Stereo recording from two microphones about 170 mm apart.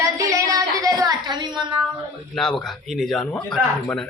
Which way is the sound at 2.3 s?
5° left (ahead or behind).